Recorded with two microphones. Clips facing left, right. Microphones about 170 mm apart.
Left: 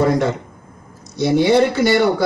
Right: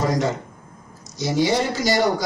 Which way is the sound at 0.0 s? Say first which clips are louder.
Left 5 dB; 60° left (ahead or behind).